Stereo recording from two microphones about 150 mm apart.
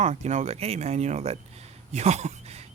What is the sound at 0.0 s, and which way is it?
Speech, 50° right (ahead or behind).